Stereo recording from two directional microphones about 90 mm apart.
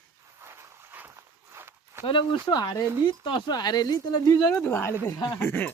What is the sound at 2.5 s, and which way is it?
Speech, 50° left (ahead or behind).